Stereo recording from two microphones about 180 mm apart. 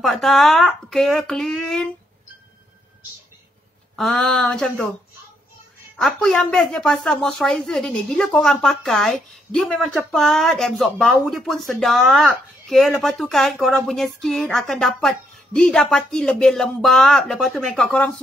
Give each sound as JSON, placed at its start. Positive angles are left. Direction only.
{"t": 0.0, "sound": "speech", "side_deg": 0}
{"t": 3.9, "sound": "speech", "side_deg": 5}
{"t": 5.9, "sound": "speech", "side_deg": 0}